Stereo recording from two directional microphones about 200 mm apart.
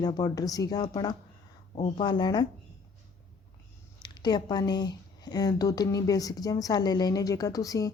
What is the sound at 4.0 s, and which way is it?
Speech, 20° left (ahead or behind).